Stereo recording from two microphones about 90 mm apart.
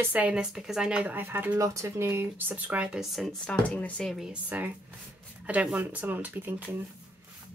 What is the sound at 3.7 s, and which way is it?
Speech, 10° left (ahead or behind).